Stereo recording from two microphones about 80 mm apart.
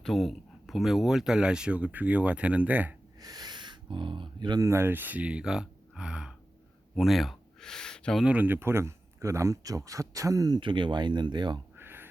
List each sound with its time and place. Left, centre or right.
0.0 s speech: centre; by 2.9 s right
3.2 s speech: right
4.6 s speech: right; by 8.2 s centre
8.2 s speech: centre; by 10.6 s right
10.6 s speech: right
11.8 s a sound: right